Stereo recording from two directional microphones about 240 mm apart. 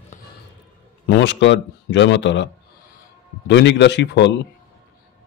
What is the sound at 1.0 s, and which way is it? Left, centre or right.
Speech, left.